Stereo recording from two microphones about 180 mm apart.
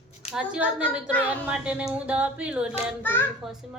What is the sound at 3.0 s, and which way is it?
Speech, 10° left (ahead or behind).